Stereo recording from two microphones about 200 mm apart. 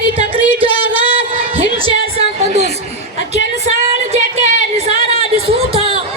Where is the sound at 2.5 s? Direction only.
30° right (ahead or behind).